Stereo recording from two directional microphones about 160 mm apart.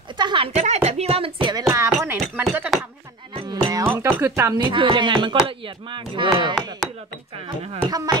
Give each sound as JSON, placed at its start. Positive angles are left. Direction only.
{"t": 0.2, "sound": "a sound", "side_deg": -30}
{"t": 0.6, "sound": "speech", "side_deg": -45}
{"t": 1.7, "sound": "speech", "side_deg": -20}
{"t": 3.3, "sound": "music", "side_deg": -30}
{"t": 3.9, "sound": "speech", "side_deg": -15}
{"t": 4.6, "sound": "speech", "side_deg": -30}
{"t": 7.8, "sound": "speech", "side_deg": -20}